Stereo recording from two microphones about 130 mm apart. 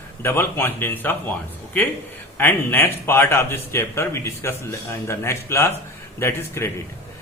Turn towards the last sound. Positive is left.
turn(degrees=20)  # may be behind; listen again after turning